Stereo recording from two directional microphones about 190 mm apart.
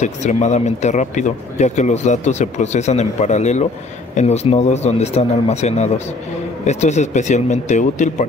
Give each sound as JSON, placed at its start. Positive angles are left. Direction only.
{"t": 0.0, "sound": "speech", "side_deg": 40}